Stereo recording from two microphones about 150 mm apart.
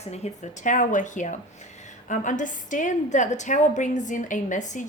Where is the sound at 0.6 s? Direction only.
60° left (ahead or behind).